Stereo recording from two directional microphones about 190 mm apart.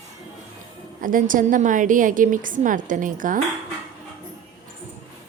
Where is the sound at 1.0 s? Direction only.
45° right (ahead or behind).